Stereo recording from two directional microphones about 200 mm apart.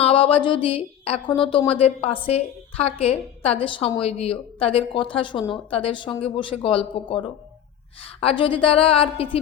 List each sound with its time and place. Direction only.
0.0 s a woman's voice: 25° left (ahead or behind)
8.0 s a woman's voice: 30° left (ahead or behind)